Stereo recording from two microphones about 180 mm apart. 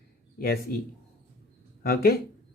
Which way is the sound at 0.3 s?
55° left (ahead or behind).